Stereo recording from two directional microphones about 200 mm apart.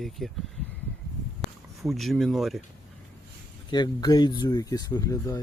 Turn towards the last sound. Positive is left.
turn(degrees=15)  # may be behind; listen again after turning